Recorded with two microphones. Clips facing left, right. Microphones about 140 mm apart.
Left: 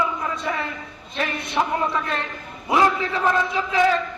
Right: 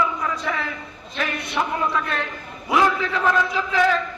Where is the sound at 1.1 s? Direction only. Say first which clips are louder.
Left 1 dB; 25° left (ahead or behind).